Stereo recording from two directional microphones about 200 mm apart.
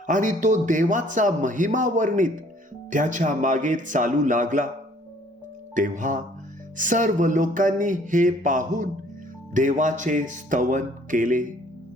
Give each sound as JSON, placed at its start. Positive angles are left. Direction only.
{"t": 0.1, "sound": "a man's voice", "side_deg": -40}
{"t": 5.7, "sound": "a man's voice", "side_deg": -40}